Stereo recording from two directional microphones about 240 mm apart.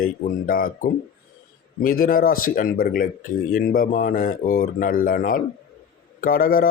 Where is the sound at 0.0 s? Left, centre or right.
Left.